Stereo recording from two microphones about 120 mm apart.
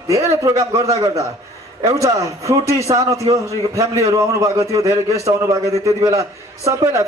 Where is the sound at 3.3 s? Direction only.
50° right (ahead or behind).